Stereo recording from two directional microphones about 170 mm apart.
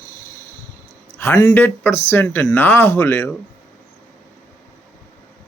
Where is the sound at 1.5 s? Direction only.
10° left (ahead or behind).